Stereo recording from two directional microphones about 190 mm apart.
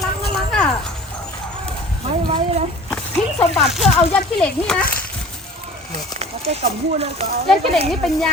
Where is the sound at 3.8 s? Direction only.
Centre (ahead or behind).